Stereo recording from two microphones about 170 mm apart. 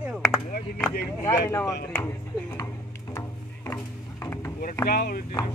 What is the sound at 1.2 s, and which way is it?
Speech, 15° left (ahead or behind).